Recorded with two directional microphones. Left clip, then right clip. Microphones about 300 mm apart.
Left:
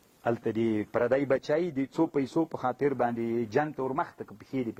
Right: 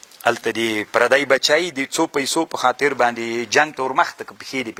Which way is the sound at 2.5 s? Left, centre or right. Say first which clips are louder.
Right 11 dB; centre.